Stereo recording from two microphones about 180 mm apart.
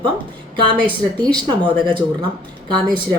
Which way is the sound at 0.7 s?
25° right (ahead or behind).